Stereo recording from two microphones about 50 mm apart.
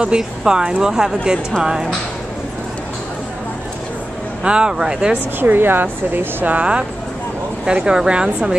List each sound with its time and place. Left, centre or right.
0.0 s a woman's voice: centre
4.4 s a woman's voice: centre
5.4 s a woman's voice: right; by 8.5 s centre